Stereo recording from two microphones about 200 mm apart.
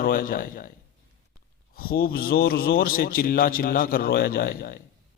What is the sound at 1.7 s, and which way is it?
A man's voice, 45° left (ahead or behind).